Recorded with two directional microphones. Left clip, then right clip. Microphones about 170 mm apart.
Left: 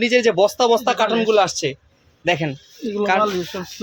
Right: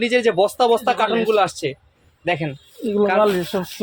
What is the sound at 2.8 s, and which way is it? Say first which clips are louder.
Speech: right 4 dB; 35° right (ahead or behind).